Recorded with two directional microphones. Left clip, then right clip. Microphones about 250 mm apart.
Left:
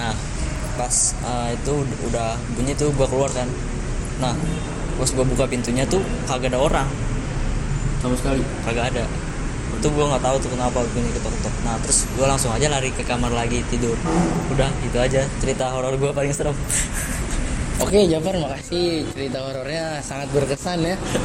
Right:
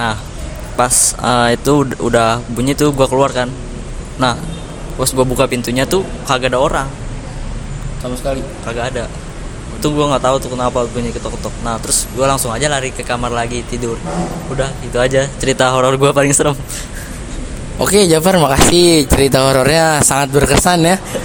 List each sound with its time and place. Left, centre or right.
0.8 s speech: right
8.6 s speech: right
9.8 s speech: right
17.7 s speech: right